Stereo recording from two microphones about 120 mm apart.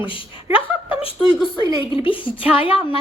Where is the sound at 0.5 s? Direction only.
45° left (ahead or behind).